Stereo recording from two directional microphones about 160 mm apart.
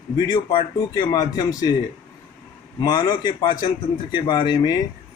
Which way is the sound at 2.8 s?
25° left (ahead or behind).